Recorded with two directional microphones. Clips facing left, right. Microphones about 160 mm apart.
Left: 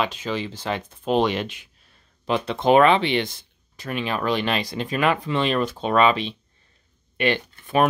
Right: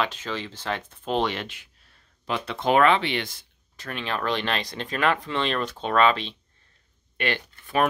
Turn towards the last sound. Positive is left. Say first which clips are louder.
# left 4 dB
turn(degrees=20)  # may be behind; listen again after turning